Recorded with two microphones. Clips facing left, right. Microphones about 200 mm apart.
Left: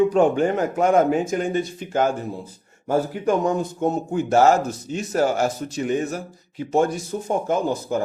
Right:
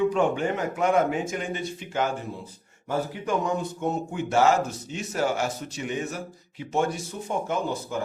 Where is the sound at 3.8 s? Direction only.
40° left (ahead or behind).